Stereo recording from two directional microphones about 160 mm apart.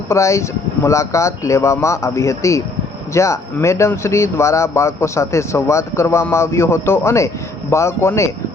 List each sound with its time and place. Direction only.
0.1 s speech: 20° left (ahead or behind)